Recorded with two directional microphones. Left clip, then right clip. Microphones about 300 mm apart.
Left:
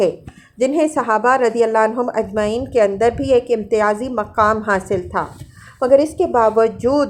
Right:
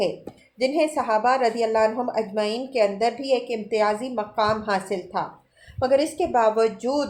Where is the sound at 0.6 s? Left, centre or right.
Left.